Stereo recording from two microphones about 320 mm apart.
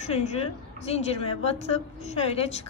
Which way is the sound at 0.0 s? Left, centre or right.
Left.